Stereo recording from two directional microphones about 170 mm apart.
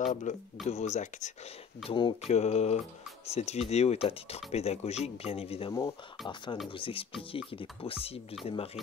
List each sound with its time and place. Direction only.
0.0 s speech: 45° left (ahead or behind)
1.9 s speech: 30° left (ahead or behind)
5.7 s speech: 20° left (ahead or behind)